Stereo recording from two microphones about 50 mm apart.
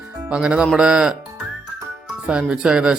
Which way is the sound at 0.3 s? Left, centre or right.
Centre.